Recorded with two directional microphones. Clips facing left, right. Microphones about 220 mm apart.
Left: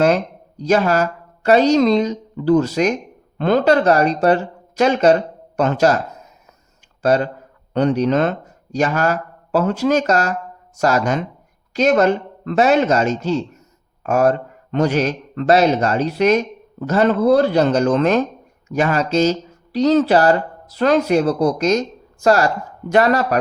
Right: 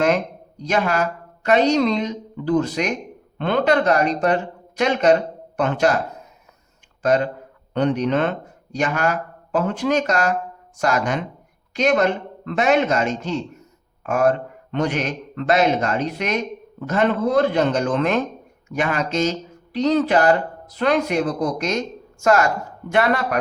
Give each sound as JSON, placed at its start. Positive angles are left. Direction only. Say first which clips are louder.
{"t": 0.6, "sound": "a man's voice", "louder": "left 5 dB", "side_deg": 40}
{"t": 7.7, "sound": "a man's voice", "louder": "left 3 dB", "side_deg": 40}